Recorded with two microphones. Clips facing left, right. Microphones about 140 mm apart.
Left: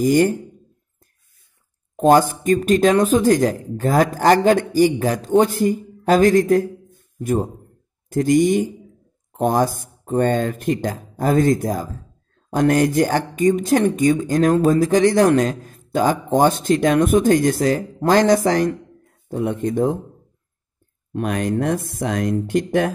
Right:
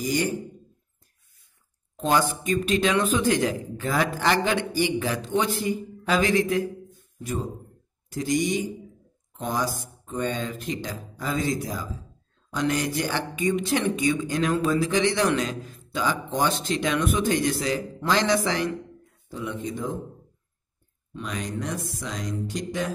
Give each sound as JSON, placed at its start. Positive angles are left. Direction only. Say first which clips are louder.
{"t": 0.0, "sound": "speech", "louder": "left 10 dB", "side_deg": 50}
{"t": 2.0, "sound": "speech", "louder": "left 9 dB", "side_deg": 45}
{"t": 21.1, "sound": "speech", "louder": "left 11 dB", "side_deg": 55}